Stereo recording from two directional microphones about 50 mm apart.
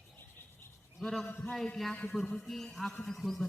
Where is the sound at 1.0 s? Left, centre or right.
Centre.